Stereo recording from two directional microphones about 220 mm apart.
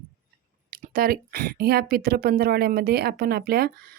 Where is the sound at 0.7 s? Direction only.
40° right (ahead or behind).